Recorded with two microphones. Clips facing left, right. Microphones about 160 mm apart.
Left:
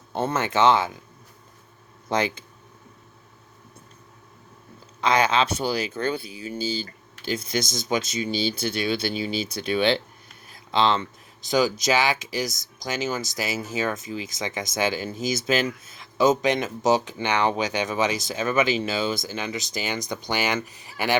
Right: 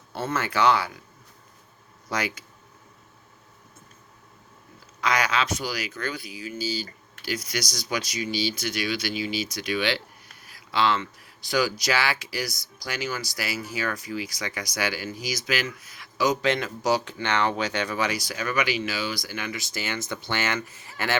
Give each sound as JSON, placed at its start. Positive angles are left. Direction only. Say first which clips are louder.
{"t": 0.1, "sound": "speech", "louder": "left 3 dB", "side_deg": 25}
{"t": 2.0, "sound": "speech", "louder": "left 5 dB", "side_deg": 25}
{"t": 4.9, "sound": "speech", "louder": "left 4 dB", "side_deg": 25}